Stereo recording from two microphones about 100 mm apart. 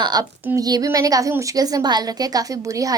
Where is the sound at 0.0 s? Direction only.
40° right (ahead or behind).